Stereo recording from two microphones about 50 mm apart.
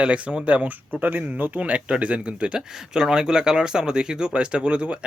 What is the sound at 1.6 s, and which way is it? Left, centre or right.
Speech, right.